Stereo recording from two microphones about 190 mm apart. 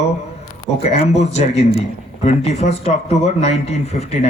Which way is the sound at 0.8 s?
35° left (ahead or behind).